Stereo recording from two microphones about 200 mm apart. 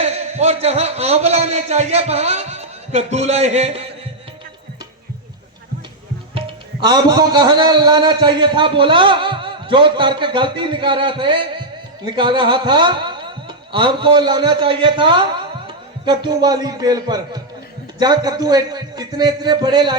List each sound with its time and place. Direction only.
0.0 s a man's voice: 35° right (ahead or behind)
6.8 s a man's voice: 20° right (ahead or behind)